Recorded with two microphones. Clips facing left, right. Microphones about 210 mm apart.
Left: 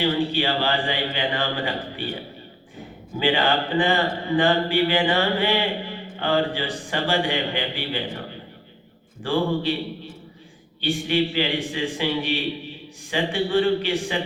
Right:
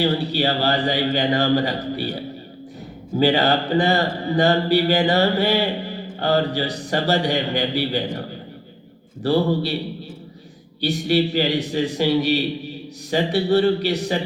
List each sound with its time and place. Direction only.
0.0 s a man's voice: 40° right (ahead or behind)
3.2 s a man's voice: 40° right (ahead or behind)
9.2 s a man's voice: 40° right (ahead or behind)
10.8 s a man's voice: 40° right (ahead or behind)